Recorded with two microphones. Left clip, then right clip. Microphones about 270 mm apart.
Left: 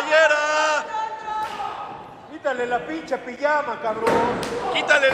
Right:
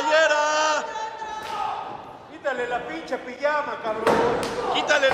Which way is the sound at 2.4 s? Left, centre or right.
Left.